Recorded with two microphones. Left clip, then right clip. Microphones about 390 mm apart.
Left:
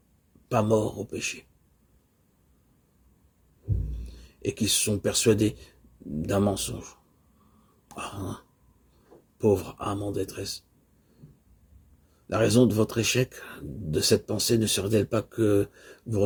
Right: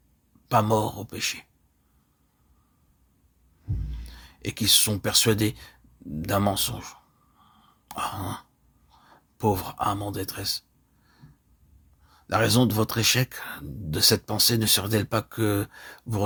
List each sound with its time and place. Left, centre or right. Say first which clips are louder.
0.4 s speech: right 2 dB; right
3.9 s speech: right 3 dB; right
7.9 s throat clearing: right 6 dB; right
9.4 s speech: even; right
12.3 s speech: even; right